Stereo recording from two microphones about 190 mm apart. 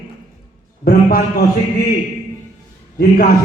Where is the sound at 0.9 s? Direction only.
50° left (ahead or behind).